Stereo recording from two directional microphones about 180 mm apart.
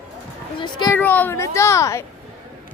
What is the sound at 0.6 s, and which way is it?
Speech, 25° left (ahead or behind).